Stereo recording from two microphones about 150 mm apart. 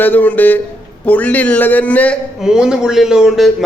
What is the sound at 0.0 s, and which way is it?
A man's voice, 10° left (ahead or behind).